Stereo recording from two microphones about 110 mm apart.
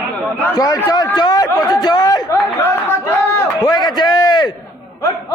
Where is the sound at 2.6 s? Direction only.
20° left (ahead or behind).